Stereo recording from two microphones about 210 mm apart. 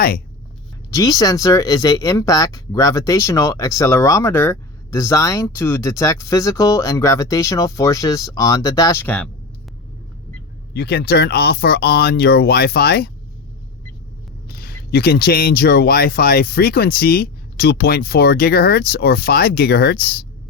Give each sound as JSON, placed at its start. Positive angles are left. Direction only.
{"t": 0.9, "sound": "speech", "side_deg": 15}
{"t": 10.8, "sound": "speech", "side_deg": 50}
{"t": 14.4, "sound": "speech", "side_deg": 50}